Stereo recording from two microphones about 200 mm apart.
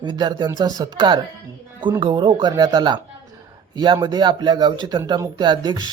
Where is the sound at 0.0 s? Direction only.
20° right (ahead or behind).